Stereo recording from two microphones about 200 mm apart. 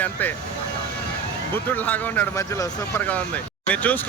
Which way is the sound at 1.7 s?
10° left (ahead or behind).